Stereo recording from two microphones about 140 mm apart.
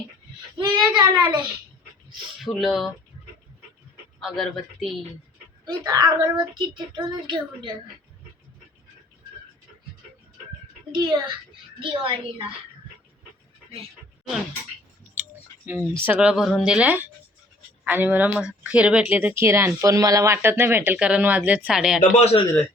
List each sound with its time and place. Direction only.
0.9 s a woman's voice: 30° right (ahead or behind)
2.4 s speech: centre (ahead or behind)
4.2 s speech: centre (ahead or behind)
5.6 s a woman's voice: 25° right (ahead or behind)
10.9 s a woman's voice: 30° right (ahead or behind)
15.6 s speech: 15° right (ahead or behind)
22.2 s speech: 45° left (ahead or behind)